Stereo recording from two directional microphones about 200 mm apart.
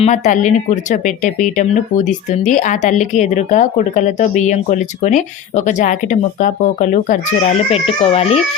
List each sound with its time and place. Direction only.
0.0 s speech: 35° left (ahead or behind)